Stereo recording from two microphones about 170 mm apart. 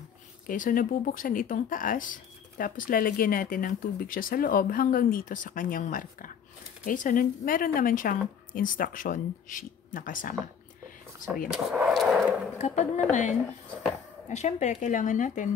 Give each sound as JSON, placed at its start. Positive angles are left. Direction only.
{"t": 0.5, "sound": "a woman's voice", "side_deg": 55}
{"t": 11.5, "sound": "a sound", "side_deg": 0}
{"t": 12.5, "sound": "a woman's voice", "side_deg": 45}